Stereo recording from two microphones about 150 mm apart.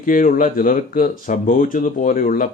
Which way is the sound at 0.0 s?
65° left (ahead or behind).